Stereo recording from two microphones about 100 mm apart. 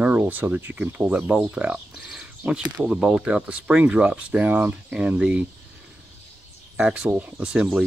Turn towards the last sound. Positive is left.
turn(degrees=-10)  # may be behind; listen again after turning